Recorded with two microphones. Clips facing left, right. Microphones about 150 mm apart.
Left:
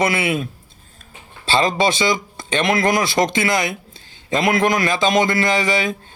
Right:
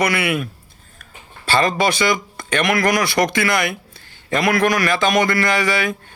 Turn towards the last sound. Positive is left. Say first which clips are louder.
# even
turn(degrees=20)  # may be behind; listen again after turning